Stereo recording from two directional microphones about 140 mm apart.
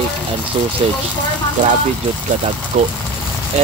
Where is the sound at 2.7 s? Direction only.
50° right (ahead or behind).